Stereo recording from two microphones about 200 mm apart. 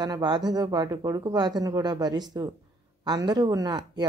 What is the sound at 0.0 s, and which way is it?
Speech, 20° right (ahead or behind).